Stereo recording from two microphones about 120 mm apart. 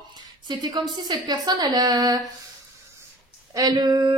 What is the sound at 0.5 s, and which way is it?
Speech, 35° right (ahead or behind).